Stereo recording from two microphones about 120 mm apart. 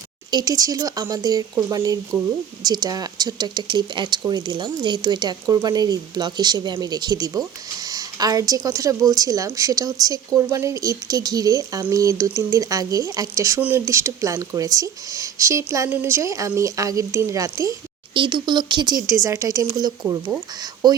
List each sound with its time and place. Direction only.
0.3 s speech: 35° right (ahead or behind)
13.6 s speech: 10° right (ahead or behind)
13.8 s speech: 25° right (ahead or behind)
18.1 s speech: 40° right (ahead or behind)